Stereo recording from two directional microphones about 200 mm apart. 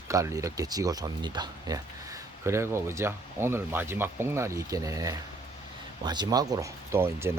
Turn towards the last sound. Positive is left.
turn(degrees=-10)  # may be behind; listen again after turning